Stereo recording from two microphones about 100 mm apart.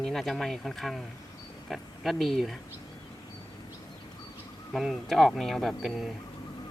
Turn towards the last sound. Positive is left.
turn(degrees=-5)  # may be behind; listen again after turning